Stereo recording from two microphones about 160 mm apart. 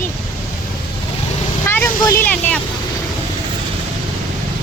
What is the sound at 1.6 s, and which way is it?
Vehicle, 15° left (ahead or behind).